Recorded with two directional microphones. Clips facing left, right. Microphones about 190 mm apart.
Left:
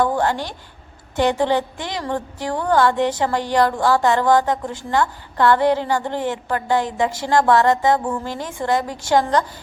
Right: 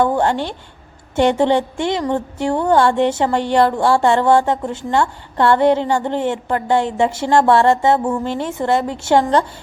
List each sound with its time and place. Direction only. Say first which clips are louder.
0.0 s a woman's voice: right 3 dB; 25° right (ahead or behind)